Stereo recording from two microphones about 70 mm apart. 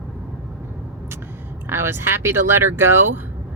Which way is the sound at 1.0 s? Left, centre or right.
Right.